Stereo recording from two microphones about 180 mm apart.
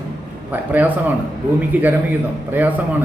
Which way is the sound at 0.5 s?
10° right (ahead or behind).